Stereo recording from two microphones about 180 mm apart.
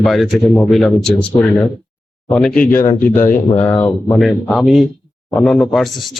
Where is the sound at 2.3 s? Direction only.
5° left (ahead or behind).